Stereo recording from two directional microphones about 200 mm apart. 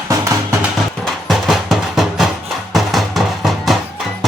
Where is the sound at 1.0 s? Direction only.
Centre (ahead or behind).